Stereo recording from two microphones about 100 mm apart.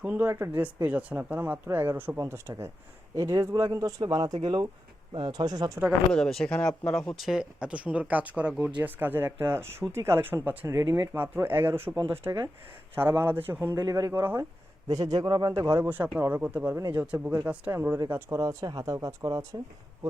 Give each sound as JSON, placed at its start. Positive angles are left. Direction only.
{"t": 0.0, "sound": "speech", "side_deg": -15}
{"t": 6.1, "sound": "speech", "side_deg": 5}
{"t": 10.7, "sound": "speech", "side_deg": -30}
{"t": 13.7, "sound": "speech", "side_deg": -35}
{"t": 14.8, "sound": "speech", "side_deg": -35}
{"t": 15.5, "sound": "speech", "side_deg": -25}
{"t": 18.1, "sound": "speech", "side_deg": -30}